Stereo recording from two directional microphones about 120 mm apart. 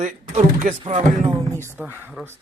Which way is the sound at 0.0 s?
75° right (ahead or behind).